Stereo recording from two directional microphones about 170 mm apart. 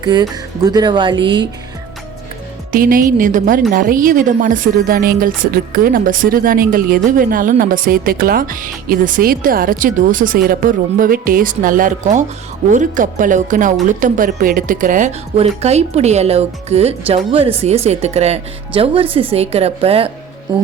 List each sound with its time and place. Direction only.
0.0 s speech: 25° right (ahead or behind)
2.7 s a woman's voice: 55° right (ahead or behind)
15.4 s speech: 40° right (ahead or behind)